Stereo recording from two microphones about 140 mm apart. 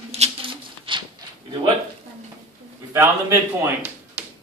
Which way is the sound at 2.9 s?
15° right (ahead or behind).